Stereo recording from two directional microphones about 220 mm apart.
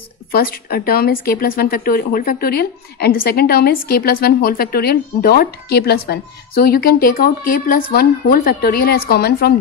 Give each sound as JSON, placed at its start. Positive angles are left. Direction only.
{"t": 0.3, "sound": "speech", "side_deg": 45}